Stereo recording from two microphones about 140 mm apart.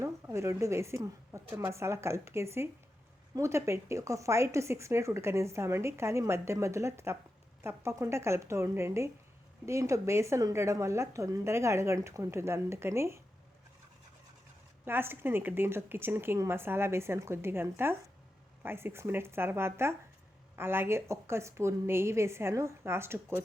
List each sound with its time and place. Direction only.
0.0 s speech: 20° right (ahead or behind)
14.8 s a woman's voice: 15° right (ahead or behind)